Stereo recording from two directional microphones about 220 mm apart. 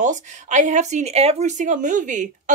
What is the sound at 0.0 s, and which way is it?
Speech, 35° right (ahead or behind).